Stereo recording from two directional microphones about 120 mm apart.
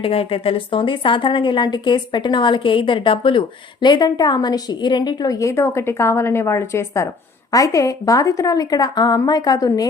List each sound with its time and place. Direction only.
0.0 s a woman's voice: 50° left (ahead or behind); by 9.9 s 30° left (ahead or behind)